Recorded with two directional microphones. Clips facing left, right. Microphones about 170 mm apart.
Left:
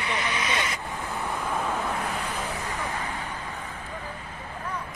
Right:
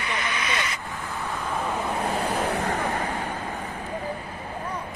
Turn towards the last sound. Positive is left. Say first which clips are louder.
# right 5 dB
turn(degrees=-45)  # may be behind; listen again after turning